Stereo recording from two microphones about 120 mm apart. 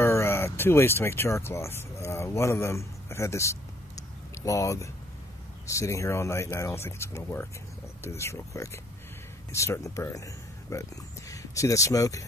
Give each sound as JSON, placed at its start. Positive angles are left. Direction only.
{"t": 0.0, "sound": "speech", "side_deg": 20}